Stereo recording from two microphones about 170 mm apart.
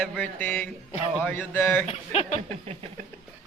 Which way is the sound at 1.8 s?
35° left (ahead or behind).